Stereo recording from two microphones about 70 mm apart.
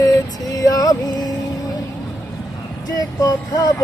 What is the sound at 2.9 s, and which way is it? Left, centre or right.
Vehicle, left.